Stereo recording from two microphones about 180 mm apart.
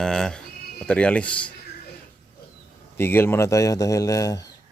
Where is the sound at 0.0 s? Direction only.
5° left (ahead or behind).